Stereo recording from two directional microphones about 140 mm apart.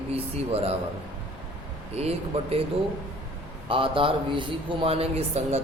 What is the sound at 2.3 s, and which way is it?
Speech, 50° right (ahead or behind).